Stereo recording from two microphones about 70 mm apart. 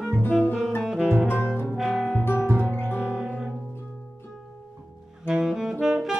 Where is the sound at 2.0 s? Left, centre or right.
Left.